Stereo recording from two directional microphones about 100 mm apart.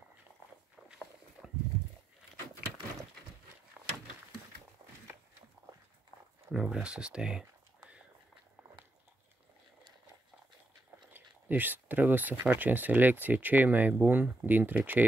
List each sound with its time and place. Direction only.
0.8 s walk: 5° right (ahead or behind)
6.5 s speech: 5° right (ahead or behind)
11.1 s speech: 20° right (ahead or behind)